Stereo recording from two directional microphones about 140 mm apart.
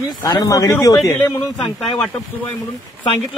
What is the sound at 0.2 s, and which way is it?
Speech, 25° left (ahead or behind).